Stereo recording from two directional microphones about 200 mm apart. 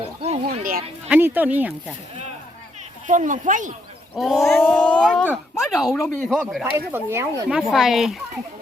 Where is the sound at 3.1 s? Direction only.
40° right (ahead or behind).